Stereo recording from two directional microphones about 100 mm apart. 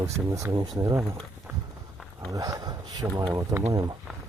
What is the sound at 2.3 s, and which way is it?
Speech, 35° right (ahead or behind).